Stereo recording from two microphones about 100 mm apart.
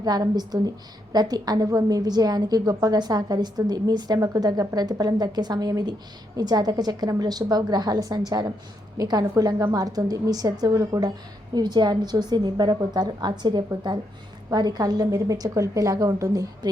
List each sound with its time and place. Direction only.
0.0 s a woman's voice: 40° right (ahead or behind)